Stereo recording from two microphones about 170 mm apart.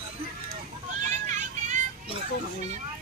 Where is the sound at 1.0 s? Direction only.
45° right (ahead or behind).